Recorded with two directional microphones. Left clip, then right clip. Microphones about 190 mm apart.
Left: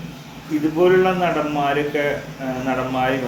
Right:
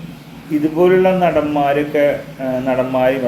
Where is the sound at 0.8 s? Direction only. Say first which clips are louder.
Right 4 dB; 15° right (ahead or behind).